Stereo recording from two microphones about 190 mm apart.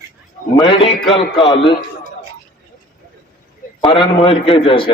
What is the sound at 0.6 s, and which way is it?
A man's voice, 25° left (ahead or behind).